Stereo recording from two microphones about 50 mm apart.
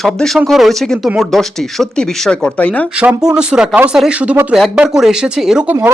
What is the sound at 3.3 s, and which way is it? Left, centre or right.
Speech, right.